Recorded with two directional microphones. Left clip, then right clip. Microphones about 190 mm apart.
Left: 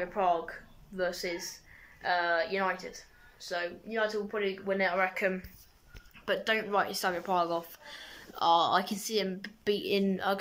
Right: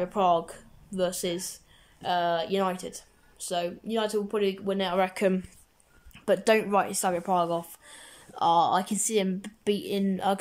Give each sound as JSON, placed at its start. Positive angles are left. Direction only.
{"t": 0.1, "sound": "speech", "side_deg": -20}
{"t": 6.7, "sound": "speech", "side_deg": -10}